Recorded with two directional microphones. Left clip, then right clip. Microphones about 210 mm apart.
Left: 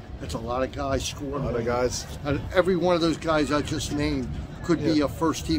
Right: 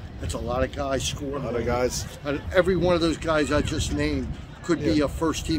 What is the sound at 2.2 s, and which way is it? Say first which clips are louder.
Speech: right 1 dB; 10° left (ahead or behind).